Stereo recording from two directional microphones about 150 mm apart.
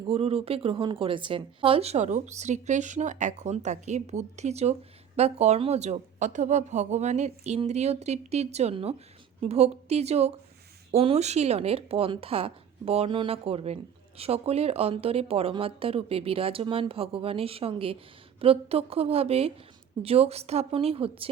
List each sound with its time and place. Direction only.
0.1 s speech: 40° right (ahead or behind)